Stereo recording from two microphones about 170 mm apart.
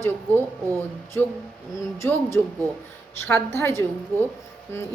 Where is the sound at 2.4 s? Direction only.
10° left (ahead or behind).